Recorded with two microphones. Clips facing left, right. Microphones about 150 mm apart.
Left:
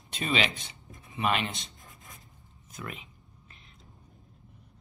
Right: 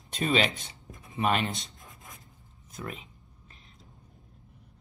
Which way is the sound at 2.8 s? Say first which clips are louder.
Right 2 dB; 35° right (ahead or behind).